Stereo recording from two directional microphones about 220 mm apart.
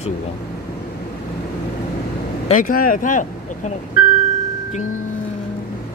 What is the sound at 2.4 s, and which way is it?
Speech, 35° left (ahead or behind).